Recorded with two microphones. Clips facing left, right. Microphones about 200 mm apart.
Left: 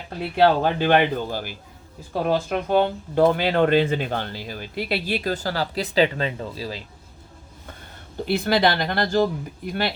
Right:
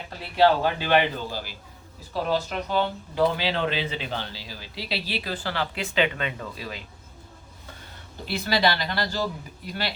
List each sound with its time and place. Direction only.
0.3 s speech: 50° left (ahead or behind); by 6.8 s 30° left (ahead or behind)
8.2 s speech: 55° left (ahead or behind)